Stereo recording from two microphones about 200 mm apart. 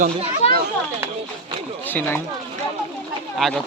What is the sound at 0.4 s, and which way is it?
Children playing, 30° left (ahead or behind).